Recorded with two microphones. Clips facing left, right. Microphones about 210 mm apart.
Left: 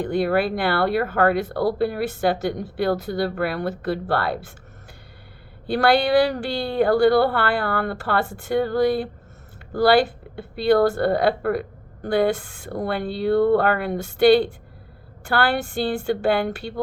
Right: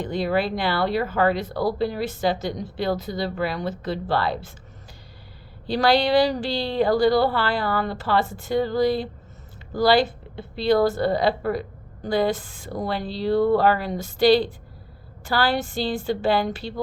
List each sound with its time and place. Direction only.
0.0 s a woman's voice: 50° left (ahead or behind)
5.7 s a woman's voice: 55° left (ahead or behind)
10.8 s a woman's voice: 60° left (ahead or behind)
15.3 s a woman's voice: 65° left (ahead or behind)